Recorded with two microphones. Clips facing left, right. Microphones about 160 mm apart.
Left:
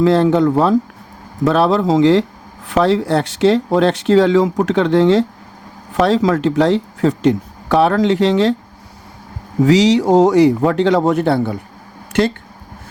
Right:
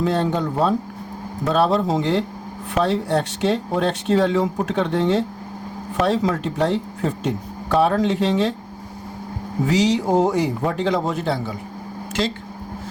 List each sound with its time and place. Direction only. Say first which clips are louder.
0.0 s speech: left 9 dB; 90° left
9.6 s speech: left 7 dB; 90° left; by 12.3 s 65° left (ahead or behind)